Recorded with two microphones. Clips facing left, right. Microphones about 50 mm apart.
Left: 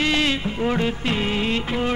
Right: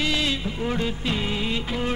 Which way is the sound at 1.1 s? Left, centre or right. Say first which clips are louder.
Left 3 dB; left.